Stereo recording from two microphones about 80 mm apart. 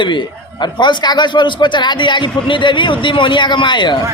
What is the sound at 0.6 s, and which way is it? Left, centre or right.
A man's voice, left.